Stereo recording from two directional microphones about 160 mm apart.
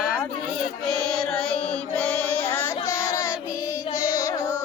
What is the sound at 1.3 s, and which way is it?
Music, 5° left (ahead or behind).